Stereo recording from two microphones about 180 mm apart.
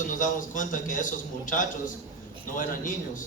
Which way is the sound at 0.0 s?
45° left (ahead or behind).